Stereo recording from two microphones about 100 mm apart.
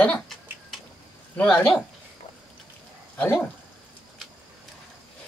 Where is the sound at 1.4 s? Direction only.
5° left (ahead or behind).